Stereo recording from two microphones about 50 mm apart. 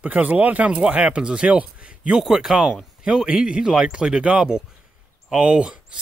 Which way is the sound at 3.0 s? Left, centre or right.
Centre.